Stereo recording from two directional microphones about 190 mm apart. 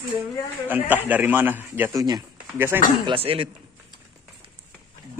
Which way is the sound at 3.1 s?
30° right (ahead or behind).